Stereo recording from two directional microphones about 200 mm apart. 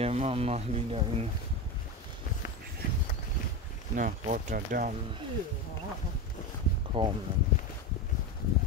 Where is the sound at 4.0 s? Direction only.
40° right (ahead or behind).